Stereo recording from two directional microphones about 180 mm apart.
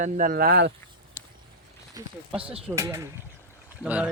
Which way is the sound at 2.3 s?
5° right (ahead or behind).